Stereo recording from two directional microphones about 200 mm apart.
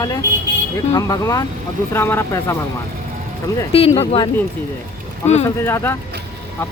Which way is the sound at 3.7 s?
30° left (ahead or behind).